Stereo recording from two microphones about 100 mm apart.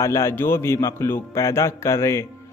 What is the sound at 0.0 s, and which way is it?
Speech, 25° left (ahead or behind).